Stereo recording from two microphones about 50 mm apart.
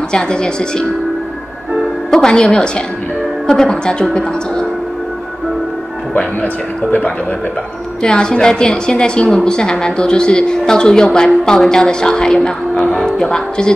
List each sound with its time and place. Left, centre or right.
0.1 s a woman's voice: centre
2.0 s a woman's voice: centre
6.4 s a man's voice: left
8.0 s a woman's voice: centre